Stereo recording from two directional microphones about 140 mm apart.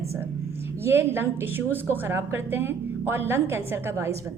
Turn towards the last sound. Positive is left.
turn(degrees=-20)  # may be behind; listen again after turning